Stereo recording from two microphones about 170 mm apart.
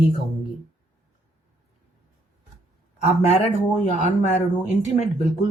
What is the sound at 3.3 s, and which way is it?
Speech, 40° left (ahead or behind).